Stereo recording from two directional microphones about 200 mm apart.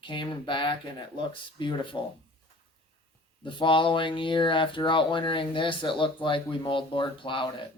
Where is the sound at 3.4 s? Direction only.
25° left (ahead or behind).